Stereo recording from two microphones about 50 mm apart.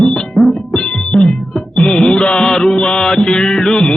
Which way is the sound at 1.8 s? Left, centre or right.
Centre.